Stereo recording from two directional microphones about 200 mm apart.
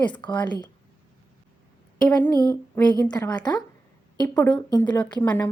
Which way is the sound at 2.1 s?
10° left (ahead or behind).